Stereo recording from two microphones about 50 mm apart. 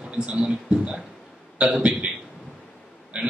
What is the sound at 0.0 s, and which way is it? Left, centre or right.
A man's voice, centre.